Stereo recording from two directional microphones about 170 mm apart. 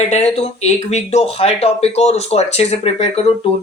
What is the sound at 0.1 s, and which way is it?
Speech, 40° left (ahead or behind).